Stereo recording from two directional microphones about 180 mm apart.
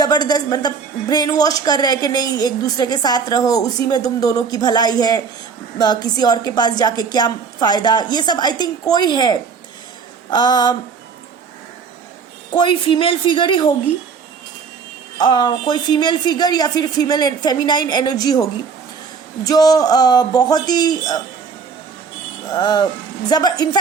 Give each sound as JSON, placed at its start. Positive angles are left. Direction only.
{"t": 0.0, "sound": "a woman's voice", "side_deg": 20}
{"t": 12.5, "sound": "a woman's voice", "side_deg": 30}
{"t": 15.2, "sound": "a woman's voice", "side_deg": 25}
{"t": 19.5, "sound": "a woman's voice", "side_deg": 20}
{"t": 22.4, "sound": "a woman's voice", "side_deg": 25}